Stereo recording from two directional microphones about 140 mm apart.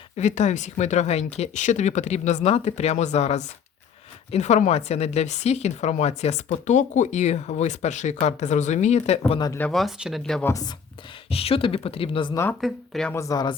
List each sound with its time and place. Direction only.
0.2 s a woman's voice: 55° left (ahead or behind)
9.6 s speech: 5° left (ahead or behind)
10.4 s speech: 25° left (ahead or behind)
11.3 s speech: 45° left (ahead or behind)
12.3 s speech: 20° left (ahead or behind)
12.5 s speech: centre (ahead or behind)
13.1 s speech: 25° left (ahead or behind)